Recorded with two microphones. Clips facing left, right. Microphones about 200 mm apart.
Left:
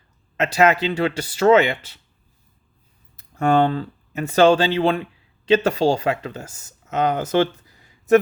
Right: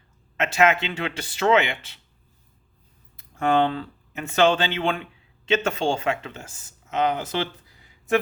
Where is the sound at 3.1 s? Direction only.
40° left (ahead or behind).